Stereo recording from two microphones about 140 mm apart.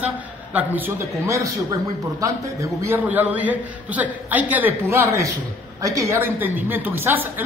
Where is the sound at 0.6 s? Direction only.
15° right (ahead or behind).